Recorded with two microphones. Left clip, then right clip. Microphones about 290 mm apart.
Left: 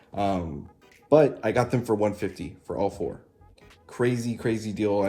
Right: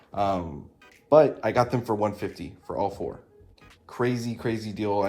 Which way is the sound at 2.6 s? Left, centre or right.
Right.